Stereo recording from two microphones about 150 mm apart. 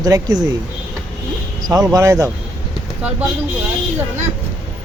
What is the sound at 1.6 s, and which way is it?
Speech, 25° right (ahead or behind).